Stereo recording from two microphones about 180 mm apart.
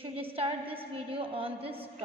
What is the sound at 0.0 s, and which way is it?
A woman's voice, 30° right (ahead or behind).